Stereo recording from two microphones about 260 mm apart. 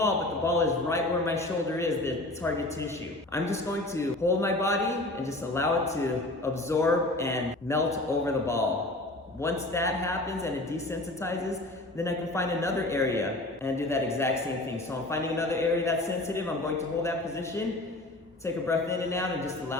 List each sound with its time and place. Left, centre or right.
0.0 s a man's voice: centre
11.9 s a man's voice: centre
18.4 s a man's voice: centre